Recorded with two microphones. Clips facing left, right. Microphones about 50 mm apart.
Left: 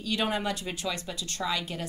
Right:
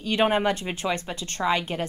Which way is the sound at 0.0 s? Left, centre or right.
Right.